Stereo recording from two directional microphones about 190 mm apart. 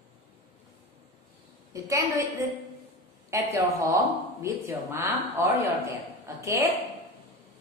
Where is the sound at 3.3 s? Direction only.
15° right (ahead or behind).